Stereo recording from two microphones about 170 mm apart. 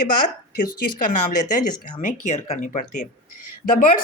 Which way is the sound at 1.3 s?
50° left (ahead or behind).